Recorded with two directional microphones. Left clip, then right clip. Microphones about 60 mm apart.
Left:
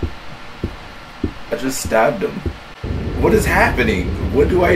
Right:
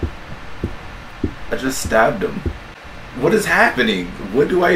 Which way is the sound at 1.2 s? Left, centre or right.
Left.